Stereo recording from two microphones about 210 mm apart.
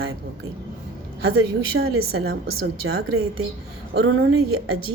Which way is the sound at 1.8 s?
80° right.